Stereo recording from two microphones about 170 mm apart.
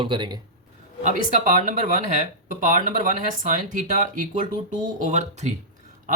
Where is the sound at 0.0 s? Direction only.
25° right (ahead or behind).